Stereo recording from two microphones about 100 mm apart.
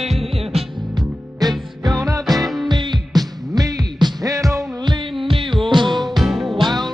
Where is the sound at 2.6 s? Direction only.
45° right (ahead or behind).